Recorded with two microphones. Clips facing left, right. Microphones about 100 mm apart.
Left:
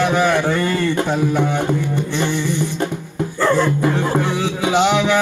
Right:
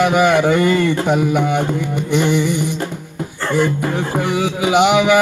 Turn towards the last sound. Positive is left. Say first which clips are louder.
# right 3 dB
turn(degrees=-10)  # may be behind; listen again after turning